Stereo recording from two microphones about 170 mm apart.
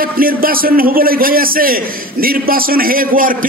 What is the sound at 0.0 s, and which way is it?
A man's voice, 60° right (ahead or behind).